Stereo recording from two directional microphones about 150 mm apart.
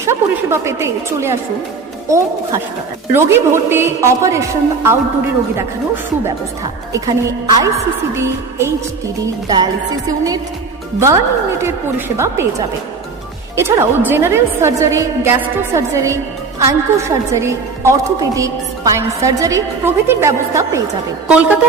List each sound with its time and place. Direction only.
0.0 s a woman's voice: 20° right (ahead or behind)
6.9 s a woman's voice: 20° right (ahead or behind)
10.1 s a woman's voice: 25° right (ahead or behind)
21.2 s a woman's voice: 10° right (ahead or behind)